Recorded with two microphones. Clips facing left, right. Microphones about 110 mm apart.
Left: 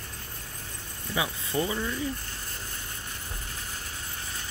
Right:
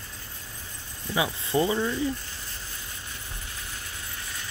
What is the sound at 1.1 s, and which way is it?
Speech, 25° right (ahead or behind).